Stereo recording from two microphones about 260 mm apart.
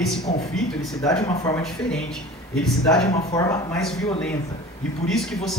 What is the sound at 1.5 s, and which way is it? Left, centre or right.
Speech, centre.